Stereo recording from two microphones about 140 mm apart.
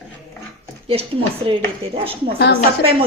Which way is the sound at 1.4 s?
40° right (ahead or behind).